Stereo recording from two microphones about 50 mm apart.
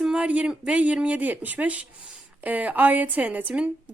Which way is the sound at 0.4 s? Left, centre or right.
Right.